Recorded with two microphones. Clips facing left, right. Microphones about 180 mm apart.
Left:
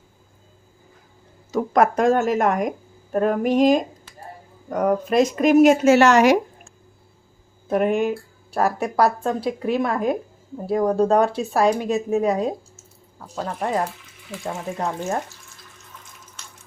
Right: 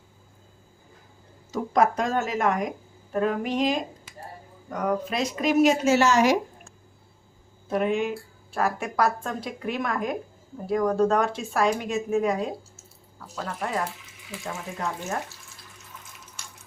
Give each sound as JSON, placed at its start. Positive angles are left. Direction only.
{"t": 1.5, "sound": "speech", "side_deg": 65}
{"t": 7.7, "sound": "speech", "side_deg": 50}